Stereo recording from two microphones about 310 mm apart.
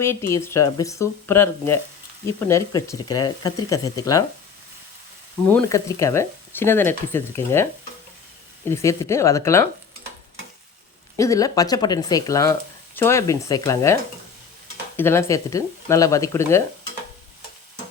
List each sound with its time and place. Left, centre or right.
0.0 s speech: centre
5.5 s speech: centre
11.2 s speech: centre